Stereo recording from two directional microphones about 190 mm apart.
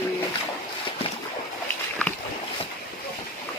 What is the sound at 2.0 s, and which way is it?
Boat, 5° left (ahead or behind).